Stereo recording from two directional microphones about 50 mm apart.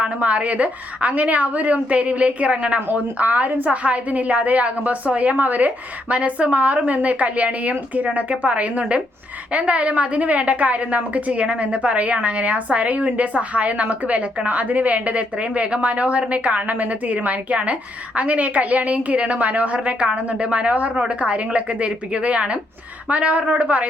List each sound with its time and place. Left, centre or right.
0.0 s a woman's voice: right